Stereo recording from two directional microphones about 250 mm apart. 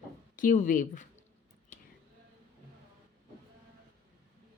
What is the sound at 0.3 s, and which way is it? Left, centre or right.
Speech, left.